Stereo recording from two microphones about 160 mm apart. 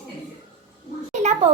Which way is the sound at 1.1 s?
45° right (ahead or behind).